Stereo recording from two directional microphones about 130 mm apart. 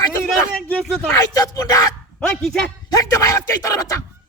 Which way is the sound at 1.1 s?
30° left (ahead or behind).